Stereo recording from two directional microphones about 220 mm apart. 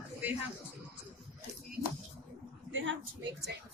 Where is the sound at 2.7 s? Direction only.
60° right (ahead or behind).